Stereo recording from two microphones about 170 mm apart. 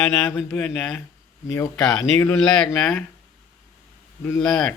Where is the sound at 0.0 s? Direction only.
5° left (ahead or behind).